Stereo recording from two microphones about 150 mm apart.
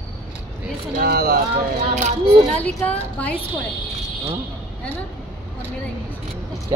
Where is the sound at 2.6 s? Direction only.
10° left (ahead or behind).